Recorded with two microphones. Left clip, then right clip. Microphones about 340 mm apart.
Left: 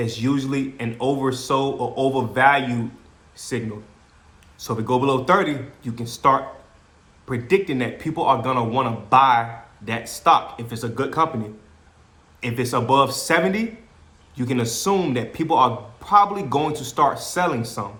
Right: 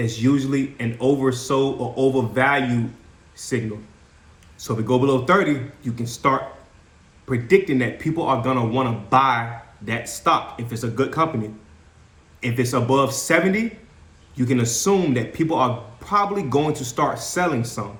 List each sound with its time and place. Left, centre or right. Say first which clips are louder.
0.0 s speech: right 2 dB; centre
12.4 s speech: right 1 dB; centre